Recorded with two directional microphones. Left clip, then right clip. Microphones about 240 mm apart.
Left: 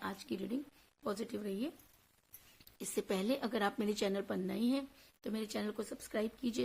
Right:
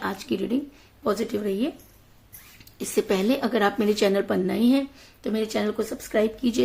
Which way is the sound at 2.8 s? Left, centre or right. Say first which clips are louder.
Right 14 dB; centre.